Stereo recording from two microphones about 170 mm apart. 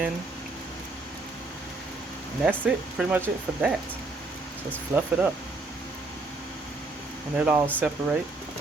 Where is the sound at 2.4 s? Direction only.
5° right (ahead or behind).